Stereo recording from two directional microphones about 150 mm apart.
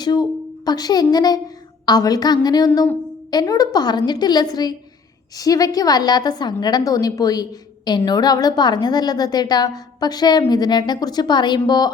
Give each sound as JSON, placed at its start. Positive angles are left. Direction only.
{"t": 0.0, "sound": "a woman's voice", "side_deg": 25}